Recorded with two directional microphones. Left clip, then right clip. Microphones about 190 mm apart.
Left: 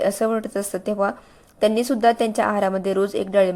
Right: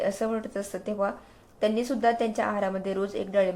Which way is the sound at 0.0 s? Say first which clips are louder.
Left 7 dB; 40° left (ahead or behind).